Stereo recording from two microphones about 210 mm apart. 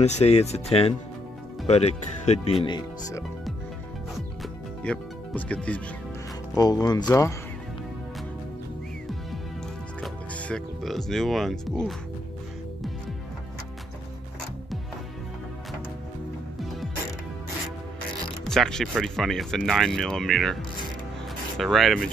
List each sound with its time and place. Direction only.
0.0 s speech: 30° left (ahead or behind)
2.6 s speech: 20° left (ahead or behind)
4.4 s music: 5° left (ahead or behind)
6.5 s speech: 20° left (ahead or behind)
10.0 s speech: centre (ahead or behind)
18.4 s speech: centre (ahead or behind)